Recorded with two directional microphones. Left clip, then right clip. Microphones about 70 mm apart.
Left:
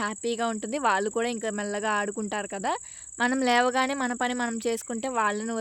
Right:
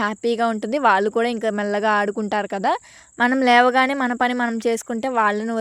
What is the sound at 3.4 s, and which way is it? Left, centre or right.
Speech, right.